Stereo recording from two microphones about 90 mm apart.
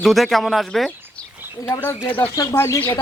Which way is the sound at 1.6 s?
25° left (ahead or behind).